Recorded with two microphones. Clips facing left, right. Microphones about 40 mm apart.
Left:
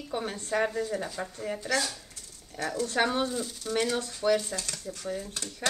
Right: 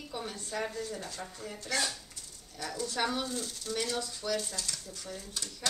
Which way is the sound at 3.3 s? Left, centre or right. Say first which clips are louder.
Left 4 dB; centre.